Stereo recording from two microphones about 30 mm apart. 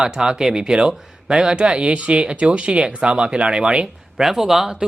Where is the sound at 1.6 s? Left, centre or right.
Right.